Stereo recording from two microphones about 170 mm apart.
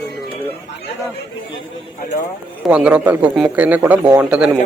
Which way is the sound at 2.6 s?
5° right (ahead or behind).